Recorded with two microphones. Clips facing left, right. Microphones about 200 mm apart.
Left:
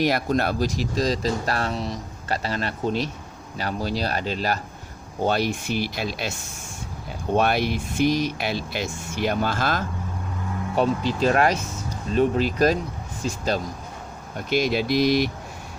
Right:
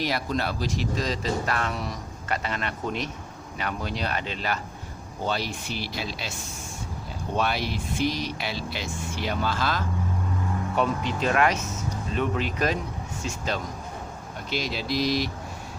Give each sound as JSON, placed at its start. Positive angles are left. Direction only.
{"t": 0.0, "sound": "speech", "side_deg": 50}
{"t": 5.2, "sound": "speech", "side_deg": 55}
{"t": 7.3, "sound": "speech", "side_deg": 55}
{"t": 10.8, "sound": "speech", "side_deg": 35}
{"t": 14.5, "sound": "speech", "side_deg": 55}